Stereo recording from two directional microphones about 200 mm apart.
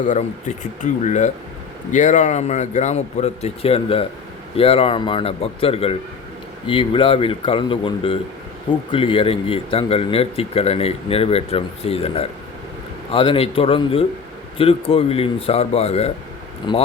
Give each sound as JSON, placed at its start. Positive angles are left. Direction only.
{"t": 0.1, "sound": "speech", "side_deg": 40}